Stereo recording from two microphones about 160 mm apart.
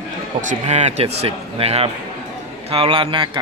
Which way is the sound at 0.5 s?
45° right (ahead or behind).